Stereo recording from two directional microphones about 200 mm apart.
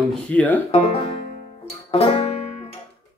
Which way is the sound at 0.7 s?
30° left (ahead or behind).